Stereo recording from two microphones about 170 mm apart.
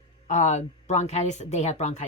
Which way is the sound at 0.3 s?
45° left (ahead or behind).